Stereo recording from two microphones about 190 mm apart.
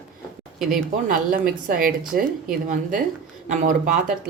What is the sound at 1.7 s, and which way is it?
Speech, 45° right (ahead or behind).